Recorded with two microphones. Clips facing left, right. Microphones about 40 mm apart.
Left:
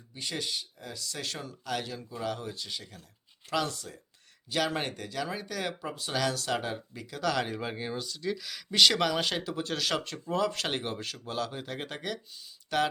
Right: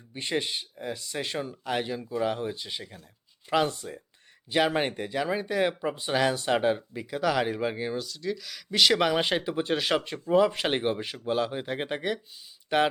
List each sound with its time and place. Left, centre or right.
0.1 s speech: right; by 9.0 s centre
9.0 s speech: right